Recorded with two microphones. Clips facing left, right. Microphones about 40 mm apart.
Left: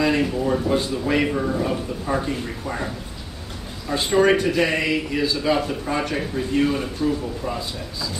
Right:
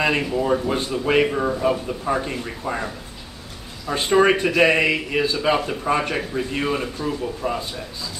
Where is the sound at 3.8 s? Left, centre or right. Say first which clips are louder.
Right 1 dB; right.